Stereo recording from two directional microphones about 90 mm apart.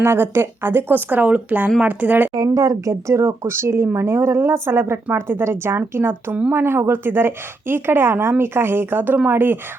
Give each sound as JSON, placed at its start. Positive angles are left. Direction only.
{"t": 0.0, "sound": "a woman's voice", "side_deg": -30}
{"t": 2.6, "sound": "a woman's voice", "side_deg": -35}